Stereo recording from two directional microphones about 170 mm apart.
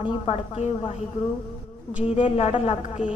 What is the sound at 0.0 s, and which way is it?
Speech, 30° left (ahead or behind).